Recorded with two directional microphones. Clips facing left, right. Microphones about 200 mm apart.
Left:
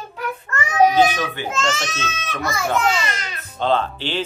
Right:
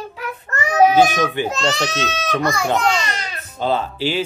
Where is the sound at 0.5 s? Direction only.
40° right (ahead or behind).